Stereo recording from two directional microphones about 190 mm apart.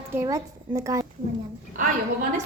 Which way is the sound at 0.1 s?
15° right (ahead or behind).